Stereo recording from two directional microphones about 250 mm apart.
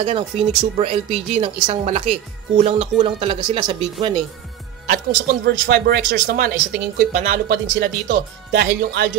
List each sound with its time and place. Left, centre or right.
0.0 s speech: right
4.8 s speech: right